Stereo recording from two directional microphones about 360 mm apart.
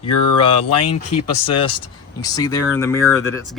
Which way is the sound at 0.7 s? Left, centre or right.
Left.